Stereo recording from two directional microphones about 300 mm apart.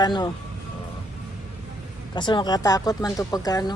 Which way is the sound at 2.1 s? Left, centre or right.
Centre.